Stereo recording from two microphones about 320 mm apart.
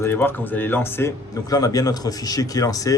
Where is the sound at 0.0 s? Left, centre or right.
Centre.